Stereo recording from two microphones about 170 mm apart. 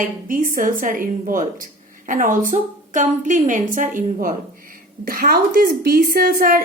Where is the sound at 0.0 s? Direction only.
50° right (ahead or behind).